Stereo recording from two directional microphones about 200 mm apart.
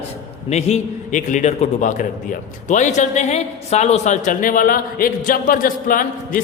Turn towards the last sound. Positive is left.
turn(degrees=45)  # may be behind; listen again after turning